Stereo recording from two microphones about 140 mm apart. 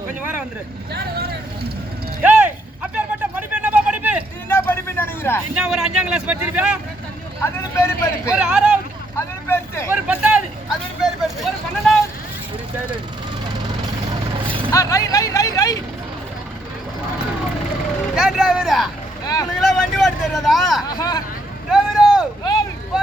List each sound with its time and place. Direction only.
2.2 s a sound: 10° right (ahead or behind)
4.4 s vehicle: 15° left (ahead or behind)
5.5 s speech: 5° right (ahead or behind)
7.4 s speech: 20° left (ahead or behind)
8.3 s speech: 5° right (ahead or behind)
9.1 s vehicle: 20° left (ahead or behind)
9.9 s a sound: 10° right (ahead or behind)
14.7 s vehicle: 25° left (ahead or behind)
18.1 s vehicle: centre (ahead or behind)
19.2 s vehicle: 25° left (ahead or behind)
19.5 s vehicle: centre (ahead or behind)
20.8 s speech: 25° left (ahead or behind)
21.7 s a sound: 5° right (ahead or behind)